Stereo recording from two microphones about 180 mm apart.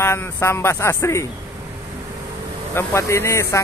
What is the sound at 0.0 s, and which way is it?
Speech, 15° left (ahead or behind).